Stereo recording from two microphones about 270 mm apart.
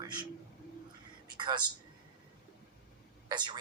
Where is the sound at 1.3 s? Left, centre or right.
Centre.